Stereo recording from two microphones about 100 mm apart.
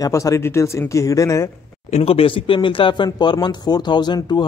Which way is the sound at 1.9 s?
70° left (ahead or behind).